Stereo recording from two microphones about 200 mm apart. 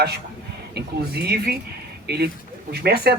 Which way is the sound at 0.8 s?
55° right (ahead or behind).